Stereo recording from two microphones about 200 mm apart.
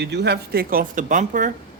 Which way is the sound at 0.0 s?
55° right (ahead or behind).